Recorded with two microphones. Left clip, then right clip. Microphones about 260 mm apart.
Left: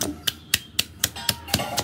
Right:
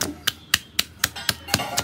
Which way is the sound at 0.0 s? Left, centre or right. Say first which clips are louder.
Right 1 dB; centre.